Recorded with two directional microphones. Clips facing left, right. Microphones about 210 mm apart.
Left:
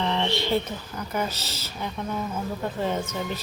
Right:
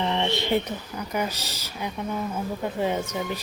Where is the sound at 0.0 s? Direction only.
20° right (ahead or behind).